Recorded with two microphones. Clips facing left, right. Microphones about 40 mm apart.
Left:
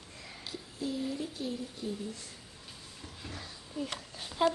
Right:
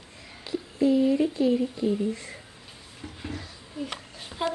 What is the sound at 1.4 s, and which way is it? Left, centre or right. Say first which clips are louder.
A woman's voice: right 14 dB; right.